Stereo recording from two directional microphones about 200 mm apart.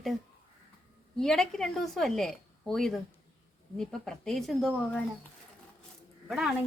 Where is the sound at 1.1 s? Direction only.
Centre (ahead or behind).